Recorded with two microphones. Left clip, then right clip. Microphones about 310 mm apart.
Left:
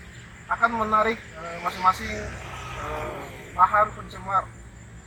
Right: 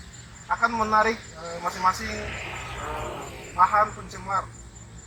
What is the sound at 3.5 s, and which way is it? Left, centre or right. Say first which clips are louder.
Speech: left 1 dB; centre.